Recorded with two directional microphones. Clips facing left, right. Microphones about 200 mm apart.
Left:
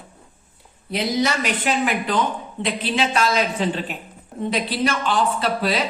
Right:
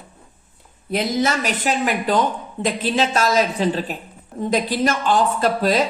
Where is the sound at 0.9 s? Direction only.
45° right (ahead or behind).